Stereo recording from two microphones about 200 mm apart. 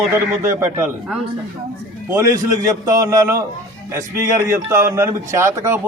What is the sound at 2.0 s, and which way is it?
A man's voice, 15° right (ahead or behind).